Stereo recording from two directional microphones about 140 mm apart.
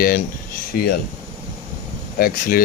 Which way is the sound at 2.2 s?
90° left.